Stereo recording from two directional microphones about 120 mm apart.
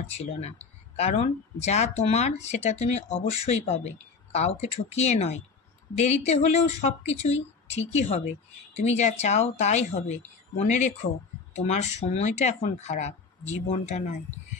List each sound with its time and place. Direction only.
0.1 s speech: 60° left (ahead or behind)